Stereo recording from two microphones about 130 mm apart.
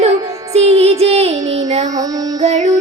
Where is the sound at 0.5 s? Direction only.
50° right (ahead or behind).